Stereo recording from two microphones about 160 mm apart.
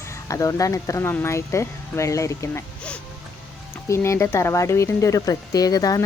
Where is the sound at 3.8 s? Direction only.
15° left (ahead or behind).